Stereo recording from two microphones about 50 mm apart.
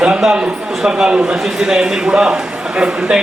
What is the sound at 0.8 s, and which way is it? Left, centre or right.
A man's voice, centre.